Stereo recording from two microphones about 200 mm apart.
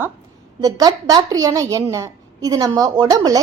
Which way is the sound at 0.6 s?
20° right (ahead or behind).